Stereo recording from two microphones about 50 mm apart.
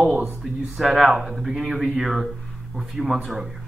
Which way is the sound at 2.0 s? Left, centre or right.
Centre.